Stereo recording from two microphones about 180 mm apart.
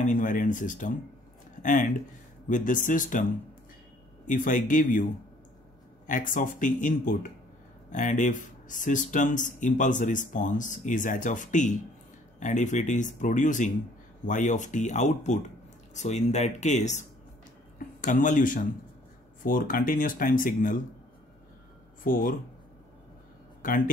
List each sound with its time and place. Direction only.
0.0 s speech: 45° left (ahead or behind)
4.3 s speech: 45° left (ahead or behind)
6.0 s speech: 45° left (ahead or behind)
22.0 s speech: 50° left (ahead or behind)
23.6 s speech: 45° left (ahead or behind)